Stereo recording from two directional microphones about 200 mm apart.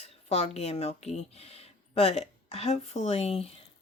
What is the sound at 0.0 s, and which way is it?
Speech, 30° left (ahead or behind).